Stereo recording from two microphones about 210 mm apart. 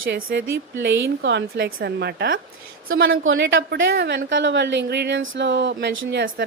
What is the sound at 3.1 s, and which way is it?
A woman's voice, 65° right (ahead or behind).